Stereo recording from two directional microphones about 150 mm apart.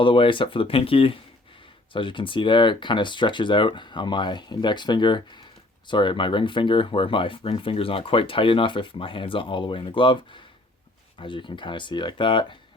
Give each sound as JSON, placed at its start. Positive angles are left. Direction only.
{"t": 0.0, "sound": "speech", "side_deg": 35}